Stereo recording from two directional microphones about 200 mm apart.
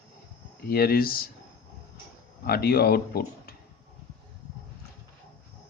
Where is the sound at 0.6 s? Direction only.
50° left (ahead or behind).